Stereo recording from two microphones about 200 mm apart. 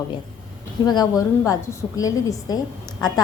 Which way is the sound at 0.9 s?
20° left (ahead or behind).